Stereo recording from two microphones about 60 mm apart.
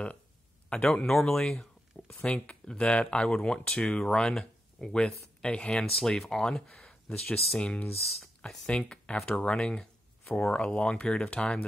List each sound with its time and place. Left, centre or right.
0.7 s speech: centre
5.9 s speech: centre